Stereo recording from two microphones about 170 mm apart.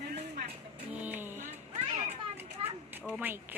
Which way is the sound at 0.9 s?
10° right (ahead or behind).